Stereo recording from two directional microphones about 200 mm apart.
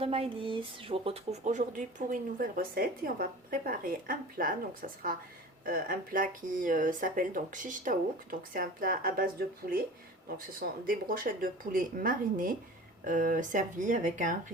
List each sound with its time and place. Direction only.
0.0 s speech: 30° right (ahead or behind)